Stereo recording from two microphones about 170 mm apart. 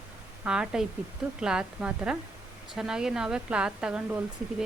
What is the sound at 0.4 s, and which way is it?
A woman's voice, 5° right (ahead or behind).